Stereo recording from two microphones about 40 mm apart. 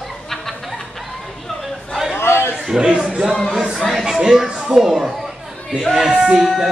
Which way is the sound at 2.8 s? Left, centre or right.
Right.